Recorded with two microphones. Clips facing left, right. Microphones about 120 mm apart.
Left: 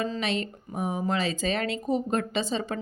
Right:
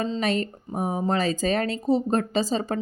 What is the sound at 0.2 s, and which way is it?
A woman's voice, 45° right (ahead or behind).